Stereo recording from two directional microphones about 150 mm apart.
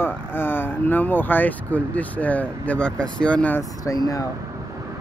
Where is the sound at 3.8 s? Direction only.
25° left (ahead or behind).